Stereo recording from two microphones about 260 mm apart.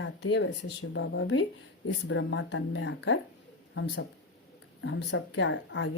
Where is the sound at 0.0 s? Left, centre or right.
Left.